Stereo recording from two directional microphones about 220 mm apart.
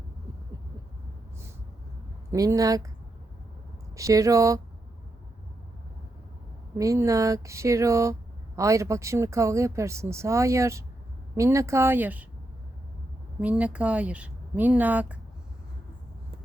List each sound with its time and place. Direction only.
2.3 s a woman's voice: 15° right (ahead or behind)
3.9 s a woman's voice: 15° right (ahead or behind)
6.7 s a woman's voice: 15° right (ahead or behind)
13.4 s speech: 5° right (ahead or behind)